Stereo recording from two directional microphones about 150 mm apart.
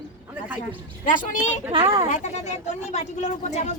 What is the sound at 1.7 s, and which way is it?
Speech, 35° right (ahead or behind).